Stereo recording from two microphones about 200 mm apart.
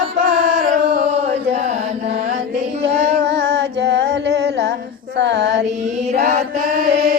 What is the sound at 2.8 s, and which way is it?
Music, 30° right (ahead or behind).